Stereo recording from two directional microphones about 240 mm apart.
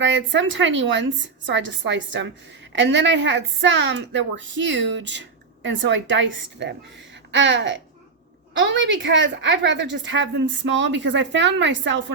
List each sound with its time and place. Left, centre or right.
0.0 s a woman's voice: right